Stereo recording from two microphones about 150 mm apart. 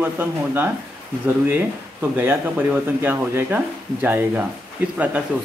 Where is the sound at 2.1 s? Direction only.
15° right (ahead or behind).